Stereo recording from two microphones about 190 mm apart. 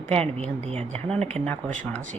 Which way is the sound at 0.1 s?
30° right (ahead or behind).